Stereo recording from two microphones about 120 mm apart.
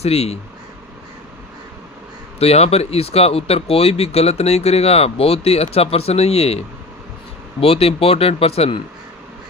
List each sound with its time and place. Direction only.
0.0 s speech: 60° left (ahead or behind)
2.3 s speech: 60° left (ahead or behind)
7.6 s speech: 55° left (ahead or behind)